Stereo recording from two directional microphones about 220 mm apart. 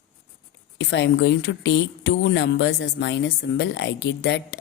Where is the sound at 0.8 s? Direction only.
55° left (ahead or behind).